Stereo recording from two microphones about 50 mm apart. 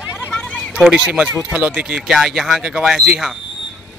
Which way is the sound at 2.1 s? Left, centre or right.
Centre.